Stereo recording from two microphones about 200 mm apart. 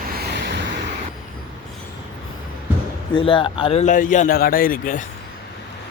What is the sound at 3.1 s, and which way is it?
Speech, 25° left (ahead or behind).